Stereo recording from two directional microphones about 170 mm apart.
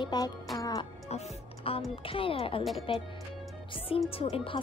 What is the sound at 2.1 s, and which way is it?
Speech, 30° left (ahead or behind).